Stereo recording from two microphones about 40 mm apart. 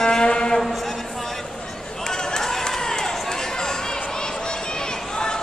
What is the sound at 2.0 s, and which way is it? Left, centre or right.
Run, centre.